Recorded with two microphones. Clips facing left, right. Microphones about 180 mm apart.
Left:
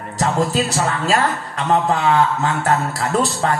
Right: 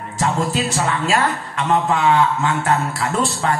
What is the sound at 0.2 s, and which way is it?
Speech, 40° left (ahead or behind).